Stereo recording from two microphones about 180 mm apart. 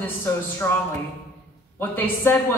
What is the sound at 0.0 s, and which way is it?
Speech, 10° left (ahead or behind).